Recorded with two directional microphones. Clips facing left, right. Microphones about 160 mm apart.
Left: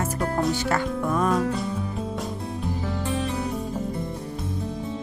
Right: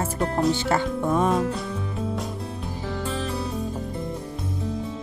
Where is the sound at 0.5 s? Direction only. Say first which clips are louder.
Right 2 dB; 25° right (ahead or behind).